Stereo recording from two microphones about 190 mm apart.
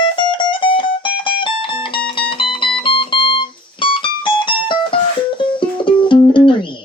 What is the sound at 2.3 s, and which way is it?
Music, 25° left (ahead or behind).